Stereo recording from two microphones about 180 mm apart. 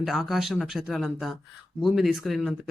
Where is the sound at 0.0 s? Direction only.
Centre (ahead or behind).